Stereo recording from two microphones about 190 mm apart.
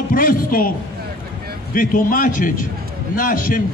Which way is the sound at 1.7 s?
45° left (ahead or behind).